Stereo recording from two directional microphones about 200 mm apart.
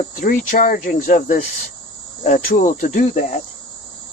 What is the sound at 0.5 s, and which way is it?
Speech, 40° left (ahead or behind).